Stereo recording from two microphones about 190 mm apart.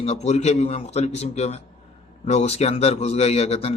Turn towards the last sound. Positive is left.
turn(degrees=35)  # may be behind; listen again after turning